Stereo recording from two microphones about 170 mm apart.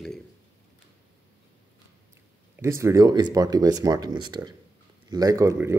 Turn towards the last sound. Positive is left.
turn(degrees=-15)  # may be behind; listen again after turning